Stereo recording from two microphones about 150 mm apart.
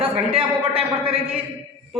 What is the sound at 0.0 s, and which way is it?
A man's voice, 40° right (ahead or behind).